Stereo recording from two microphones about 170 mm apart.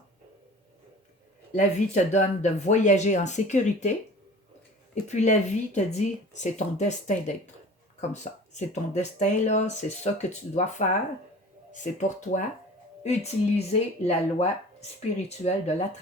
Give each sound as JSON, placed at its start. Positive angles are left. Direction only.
{"t": 1.5, "sound": "speech", "side_deg": 45}
{"t": 5.0, "sound": "speech", "side_deg": 45}